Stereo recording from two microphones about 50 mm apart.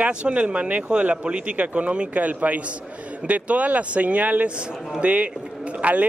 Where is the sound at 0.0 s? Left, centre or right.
Right.